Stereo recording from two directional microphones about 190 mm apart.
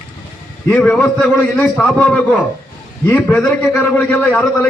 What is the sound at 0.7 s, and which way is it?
A man's voice, 5° left (ahead or behind).